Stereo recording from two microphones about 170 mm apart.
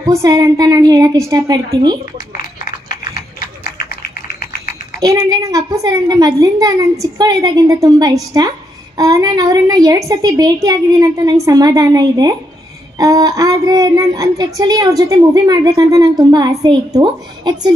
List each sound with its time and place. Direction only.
0.0 s a child's voice: 20° right (ahead or behind)
2.9 s typing: 55° left (ahead or behind)
5.0 s a child's voice: 20° right (ahead or behind)